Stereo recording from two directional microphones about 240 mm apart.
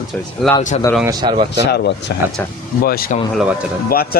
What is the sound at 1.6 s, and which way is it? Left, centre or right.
Speech, left.